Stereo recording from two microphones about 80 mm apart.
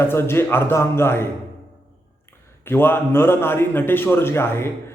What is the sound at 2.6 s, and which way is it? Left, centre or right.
A man's voice, left.